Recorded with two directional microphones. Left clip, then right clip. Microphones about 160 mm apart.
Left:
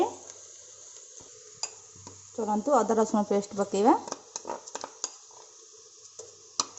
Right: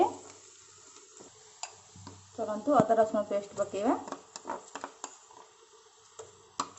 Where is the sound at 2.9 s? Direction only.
70° left (ahead or behind).